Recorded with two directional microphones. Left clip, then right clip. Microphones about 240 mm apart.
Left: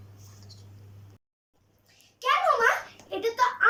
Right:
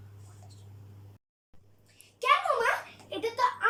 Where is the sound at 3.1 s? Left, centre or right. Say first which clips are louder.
Left 3 dB; centre.